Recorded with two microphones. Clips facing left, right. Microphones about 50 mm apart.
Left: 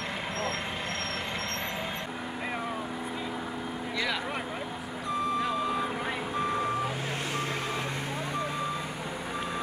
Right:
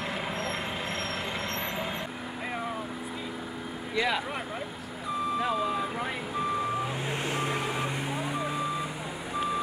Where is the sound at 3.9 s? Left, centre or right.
Centre.